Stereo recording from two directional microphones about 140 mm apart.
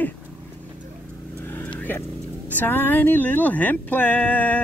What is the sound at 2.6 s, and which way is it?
Speech, 15° left (ahead or behind).